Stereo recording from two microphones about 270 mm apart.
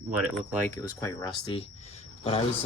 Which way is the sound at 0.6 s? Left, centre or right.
Centre.